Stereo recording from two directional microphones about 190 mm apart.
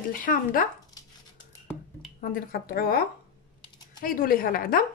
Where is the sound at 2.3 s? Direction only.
50° left (ahead or behind).